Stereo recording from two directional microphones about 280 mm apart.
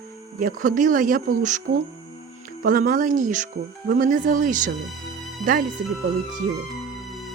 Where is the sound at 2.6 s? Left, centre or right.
Right.